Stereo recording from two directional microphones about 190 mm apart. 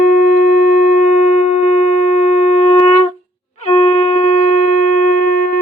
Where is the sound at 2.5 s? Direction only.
40° left (ahead or behind).